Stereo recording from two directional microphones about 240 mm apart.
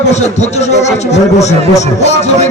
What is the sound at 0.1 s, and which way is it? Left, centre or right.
A man's voice, left.